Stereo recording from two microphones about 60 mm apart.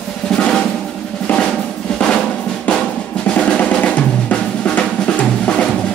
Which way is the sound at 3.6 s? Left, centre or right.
Centre.